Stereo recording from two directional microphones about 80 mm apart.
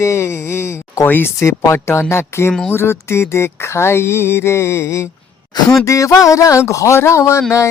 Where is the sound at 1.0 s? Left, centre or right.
Left.